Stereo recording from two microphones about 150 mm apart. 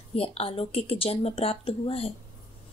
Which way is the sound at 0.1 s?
40° left (ahead or behind).